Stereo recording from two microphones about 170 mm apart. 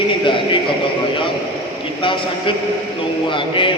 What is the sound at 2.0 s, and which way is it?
A man's voice, 30° left (ahead or behind).